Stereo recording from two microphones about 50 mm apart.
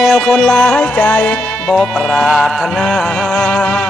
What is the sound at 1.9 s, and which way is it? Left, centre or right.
Music, centre.